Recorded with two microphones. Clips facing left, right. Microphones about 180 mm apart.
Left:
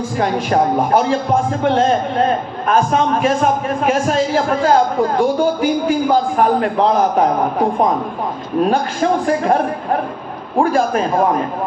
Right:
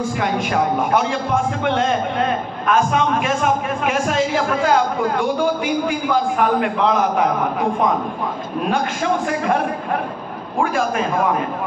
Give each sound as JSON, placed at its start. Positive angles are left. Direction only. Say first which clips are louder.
{"t": 0.2, "sound": "a man's voice", "louder": "left 6 dB", "side_deg": 35}
{"t": 10.6, "sound": "a man's voice", "louder": "left 4 dB", "side_deg": 35}